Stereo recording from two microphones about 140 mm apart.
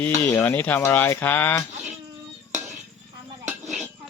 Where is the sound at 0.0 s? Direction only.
15° left (ahead or behind).